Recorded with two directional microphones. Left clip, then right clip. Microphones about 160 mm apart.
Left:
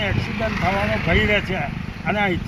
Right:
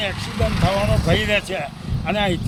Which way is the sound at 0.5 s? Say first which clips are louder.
Right 1 dB; 45° left (ahead or behind).